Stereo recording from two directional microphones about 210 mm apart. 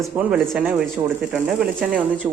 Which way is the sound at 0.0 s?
10° right (ahead or behind).